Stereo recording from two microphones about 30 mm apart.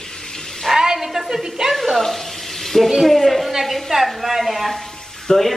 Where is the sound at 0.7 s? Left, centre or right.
Centre.